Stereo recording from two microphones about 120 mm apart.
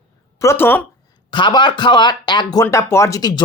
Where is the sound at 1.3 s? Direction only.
40° left (ahead or behind).